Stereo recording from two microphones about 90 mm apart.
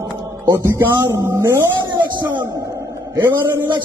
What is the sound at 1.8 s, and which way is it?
Music, 60° right (ahead or behind).